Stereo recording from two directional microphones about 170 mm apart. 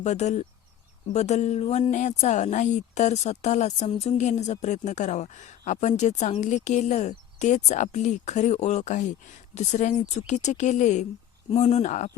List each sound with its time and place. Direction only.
0.0 s speech: 40° left (ahead or behind)